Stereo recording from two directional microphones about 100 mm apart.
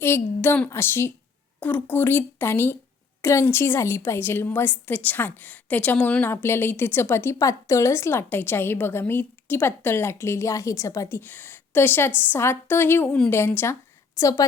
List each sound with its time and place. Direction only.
0.0 s a woman's voice: 20° left (ahead or behind)
11.2 s a woman's voice: 20° left (ahead or behind)
13.1 s a woman's voice: 10° left (ahead or behind)
13.3 s a woman's voice: 25° left (ahead or behind)
14.2 s a woman's voice: 35° left (ahead or behind)